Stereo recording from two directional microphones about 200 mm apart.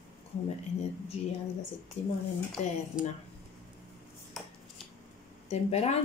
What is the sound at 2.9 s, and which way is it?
Speech, 5° right (ahead or behind).